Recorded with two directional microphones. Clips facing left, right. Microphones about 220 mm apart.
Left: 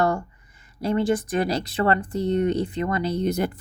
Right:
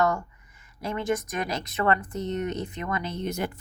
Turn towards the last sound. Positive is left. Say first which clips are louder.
# left 6 dB
turn(degrees=35)  # may be behind; listen again after turning